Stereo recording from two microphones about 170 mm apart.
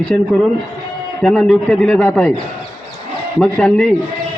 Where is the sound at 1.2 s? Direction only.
Centre (ahead or behind).